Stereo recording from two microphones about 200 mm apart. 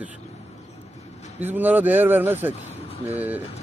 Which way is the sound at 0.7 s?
35° left (ahead or behind).